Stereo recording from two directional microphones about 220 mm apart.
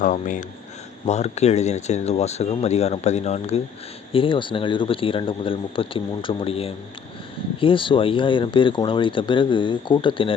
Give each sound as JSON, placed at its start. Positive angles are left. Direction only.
{"t": 0.0, "sound": "speech", "side_deg": 35}